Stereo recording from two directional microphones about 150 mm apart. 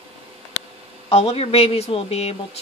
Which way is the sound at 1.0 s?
40° left (ahead or behind).